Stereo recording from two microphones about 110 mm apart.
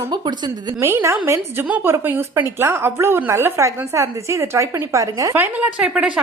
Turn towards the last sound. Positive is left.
turn(degrees=-10)  # may be behind; listen again after turning